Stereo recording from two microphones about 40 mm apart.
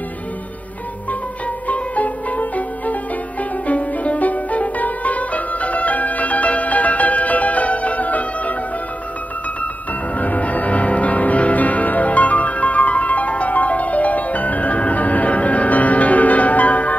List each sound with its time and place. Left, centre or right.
1.7 s music: left
10.1 s music: left